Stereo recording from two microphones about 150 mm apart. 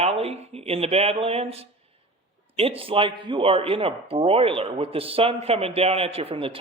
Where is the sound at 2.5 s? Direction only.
40° right (ahead or behind).